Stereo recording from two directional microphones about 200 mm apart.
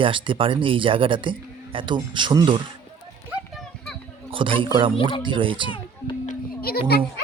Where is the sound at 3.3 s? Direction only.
Centre (ahead or behind).